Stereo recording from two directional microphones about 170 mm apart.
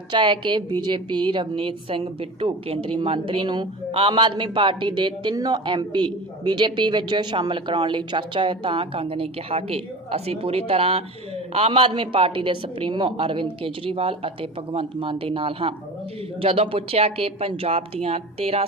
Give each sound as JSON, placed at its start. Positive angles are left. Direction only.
{"t": 0.1, "sound": "a woman's voice", "side_deg": -30}